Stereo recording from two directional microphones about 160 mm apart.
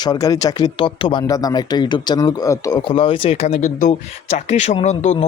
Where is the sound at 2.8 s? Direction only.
35° left (ahead or behind).